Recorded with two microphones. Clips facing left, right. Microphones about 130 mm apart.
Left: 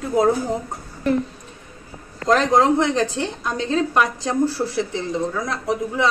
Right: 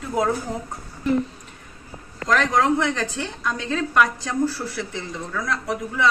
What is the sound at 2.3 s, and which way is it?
A woman's voice, 25° left (ahead or behind).